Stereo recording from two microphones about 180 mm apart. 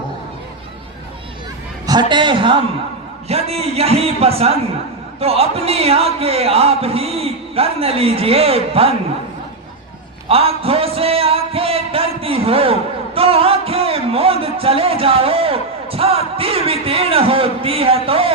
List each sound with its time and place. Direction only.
1.9 s a man's voice: 25° right (ahead or behind)
10.2 s a man's voice: 35° right (ahead or behind)